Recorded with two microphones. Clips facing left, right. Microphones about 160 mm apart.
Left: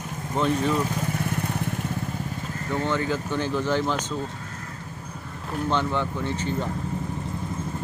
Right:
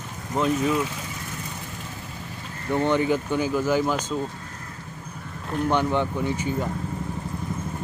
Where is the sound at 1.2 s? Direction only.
60° left (ahead or behind).